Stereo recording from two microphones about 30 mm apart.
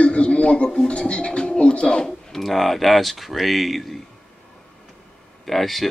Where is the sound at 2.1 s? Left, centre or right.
Centre.